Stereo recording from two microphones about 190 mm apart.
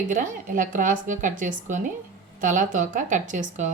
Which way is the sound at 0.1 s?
40° right (ahead or behind).